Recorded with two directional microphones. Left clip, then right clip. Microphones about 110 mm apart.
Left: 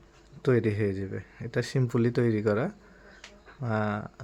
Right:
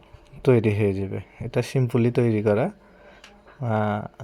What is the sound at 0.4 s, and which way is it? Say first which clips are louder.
Speech: right 6 dB; 25° right (ahead or behind).